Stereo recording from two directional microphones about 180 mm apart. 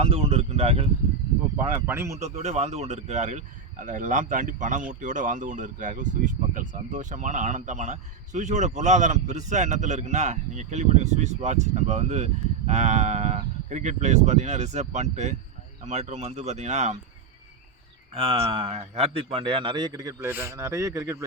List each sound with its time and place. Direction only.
0.0 s speech: 35° right (ahead or behind)
1.6 s speech: 15° right (ahead or behind)
2.2 s a man's voice: 40° right (ahead or behind)
18.1 s a man's voice: 35° right (ahead or behind); by 21.2 s 15° right (ahead or behind)